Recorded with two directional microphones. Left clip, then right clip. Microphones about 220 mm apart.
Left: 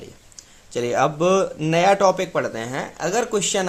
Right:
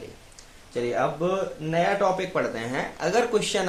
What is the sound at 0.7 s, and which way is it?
Speech, 45° left (ahead or behind).